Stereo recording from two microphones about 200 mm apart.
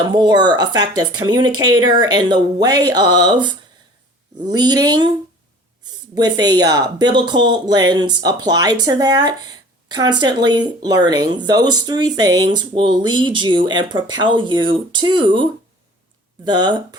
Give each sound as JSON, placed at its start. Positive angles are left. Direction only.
{"t": 0.1, "sound": "speech", "side_deg": -20}
{"t": 6.1, "sound": "speech", "side_deg": -20}